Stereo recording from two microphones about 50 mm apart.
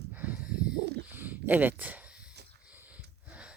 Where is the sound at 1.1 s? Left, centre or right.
Right.